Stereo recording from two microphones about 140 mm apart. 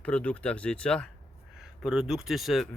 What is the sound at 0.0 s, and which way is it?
Speech, 10° left (ahead or behind).